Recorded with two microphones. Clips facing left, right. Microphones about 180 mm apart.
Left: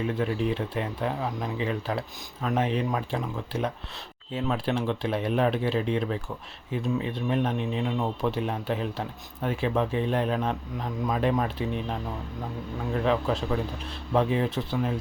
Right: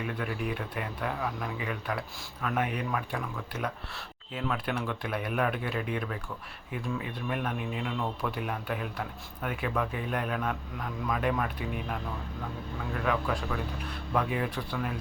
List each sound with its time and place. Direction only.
0.0 s speech: 25° left (ahead or behind)